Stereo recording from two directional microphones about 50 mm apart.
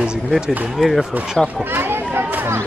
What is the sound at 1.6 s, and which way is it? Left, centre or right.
Chatter, right.